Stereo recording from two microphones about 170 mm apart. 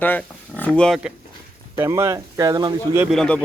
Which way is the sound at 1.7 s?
15° right (ahead or behind).